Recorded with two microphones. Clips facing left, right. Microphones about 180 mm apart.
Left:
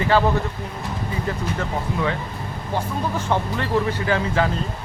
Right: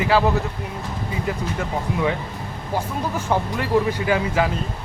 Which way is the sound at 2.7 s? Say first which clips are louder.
Even; 10° right (ahead or behind).